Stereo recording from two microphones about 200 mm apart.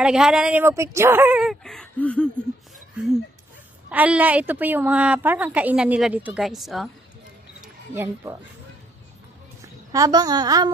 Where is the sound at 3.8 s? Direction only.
5° right (ahead or behind).